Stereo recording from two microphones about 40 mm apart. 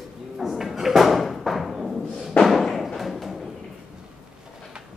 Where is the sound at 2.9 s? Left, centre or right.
Centre.